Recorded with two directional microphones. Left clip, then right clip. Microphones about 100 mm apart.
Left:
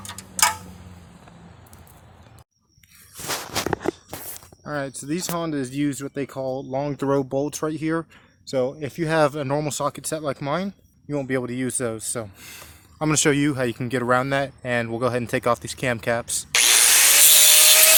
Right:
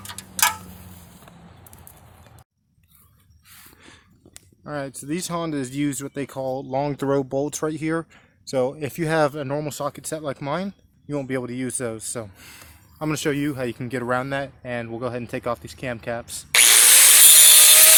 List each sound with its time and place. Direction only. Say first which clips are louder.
4.6 s speech: left 2 dB; 10° left (ahead or behind); by 6.7 s 15° right (ahead or behind)
6.7 s speech: right 3 dB; 25° right (ahead or behind)
7.0 s speech: even; 5° right (ahead or behind)
8.7 s speech: even; 30° right (ahead or behind)
9.2 s speech: left 2 dB; 10° left (ahead or behind)
11.3 s speech: left 2 dB; 10° left (ahead or behind)
13.0 s speech: left 4 dB; 35° left (ahead or behind)
16.6 s wood: right 1 dB; 55° right (ahead or behind)